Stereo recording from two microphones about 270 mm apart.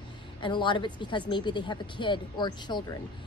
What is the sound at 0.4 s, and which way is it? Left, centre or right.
A woman's voice, centre.